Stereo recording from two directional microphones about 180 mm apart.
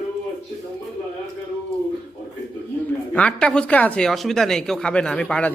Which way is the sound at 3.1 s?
5° left (ahead or behind).